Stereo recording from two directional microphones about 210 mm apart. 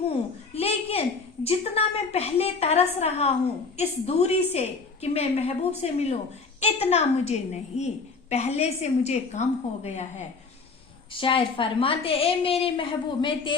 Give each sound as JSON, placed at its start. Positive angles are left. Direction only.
{"t": 0.5, "sound": "a sound", "side_deg": 30}
{"t": 1.5, "sound": "a woman's voice", "side_deg": 30}
{"t": 11.1, "sound": "a woman's voice", "side_deg": 25}